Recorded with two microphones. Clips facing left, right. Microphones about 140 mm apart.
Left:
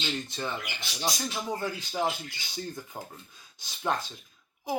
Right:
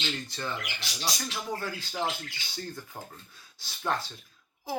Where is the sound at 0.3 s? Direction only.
20° left (ahead or behind).